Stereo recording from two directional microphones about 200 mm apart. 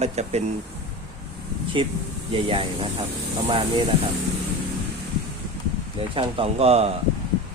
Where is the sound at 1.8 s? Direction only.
25° right (ahead or behind).